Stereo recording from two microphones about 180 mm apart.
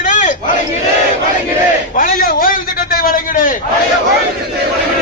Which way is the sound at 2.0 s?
50° left (ahead or behind).